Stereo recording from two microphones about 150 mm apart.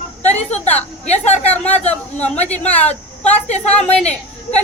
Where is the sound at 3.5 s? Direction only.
50° left (ahead or behind).